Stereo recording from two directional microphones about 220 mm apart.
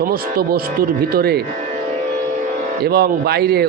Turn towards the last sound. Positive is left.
turn(degrees=-45)  # may be behind; listen again after turning